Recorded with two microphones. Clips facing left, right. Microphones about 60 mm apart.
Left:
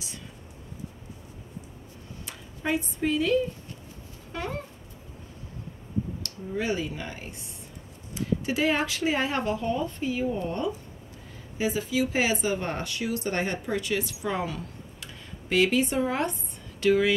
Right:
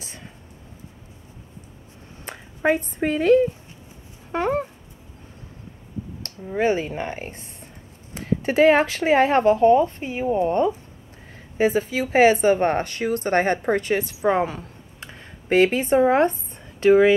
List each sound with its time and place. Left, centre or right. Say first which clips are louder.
2.2 s speech: right 10 dB; right
4.3 s a sound: right 11 dB; right
6.2 s a woman's voice: right 11 dB; right